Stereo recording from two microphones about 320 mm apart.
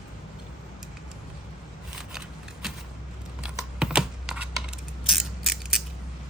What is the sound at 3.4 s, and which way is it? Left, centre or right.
Computer keyboard, centre.